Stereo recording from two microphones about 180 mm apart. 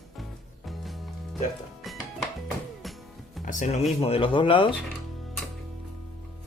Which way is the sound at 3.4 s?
45° left (ahead or behind).